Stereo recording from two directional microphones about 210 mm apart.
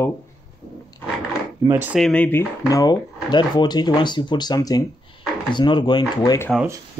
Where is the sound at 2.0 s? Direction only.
5° left (ahead or behind).